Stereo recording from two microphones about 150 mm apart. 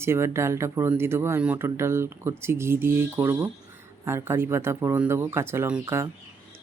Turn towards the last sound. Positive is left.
turn(degrees=-20)  # may be behind; listen again after turning